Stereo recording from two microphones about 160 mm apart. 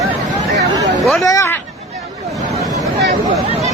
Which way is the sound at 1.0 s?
Centre (ahead or behind).